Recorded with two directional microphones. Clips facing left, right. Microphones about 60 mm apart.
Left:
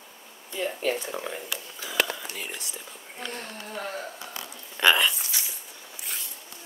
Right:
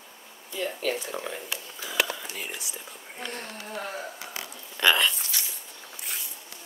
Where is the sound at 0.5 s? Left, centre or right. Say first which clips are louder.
Left 1 dB; left.